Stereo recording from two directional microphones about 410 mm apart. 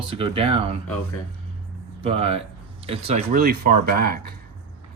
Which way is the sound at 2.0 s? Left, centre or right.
Centre.